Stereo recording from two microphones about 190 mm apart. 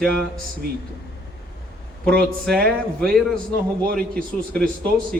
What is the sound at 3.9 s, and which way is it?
Speech, 50° right (ahead or behind).